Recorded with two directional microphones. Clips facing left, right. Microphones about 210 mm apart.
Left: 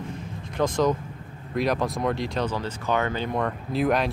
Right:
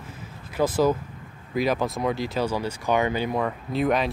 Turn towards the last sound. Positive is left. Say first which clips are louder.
# even
turn(degrees=0)  # may be behind; listen again after turning